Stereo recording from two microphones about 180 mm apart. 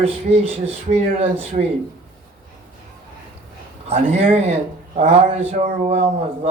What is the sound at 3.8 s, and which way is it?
Speech, 35° right (ahead or behind).